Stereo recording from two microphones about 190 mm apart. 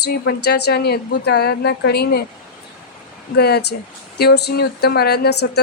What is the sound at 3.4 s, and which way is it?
Speech, 55° left (ahead or behind).